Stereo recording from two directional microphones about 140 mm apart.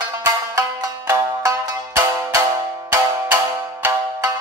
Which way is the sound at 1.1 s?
25° right (ahead or behind).